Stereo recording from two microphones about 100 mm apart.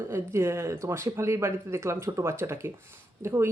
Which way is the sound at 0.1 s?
25° right (ahead or behind).